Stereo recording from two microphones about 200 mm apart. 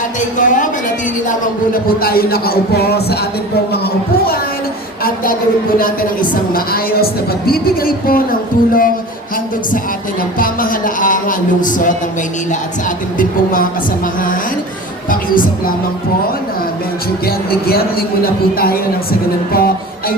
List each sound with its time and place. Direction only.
0.2 s a woman's voice: 40° left (ahead or behind)
5.0 s speech: 45° left (ahead or behind)
6.5 s speech: 50° left (ahead or behind)
10.3 s speech: 45° left (ahead or behind)
13.1 s speech: 45° left (ahead or behind)
15.1 s speech: 45° left (ahead or behind)
19.5 s music: 50° left (ahead or behind)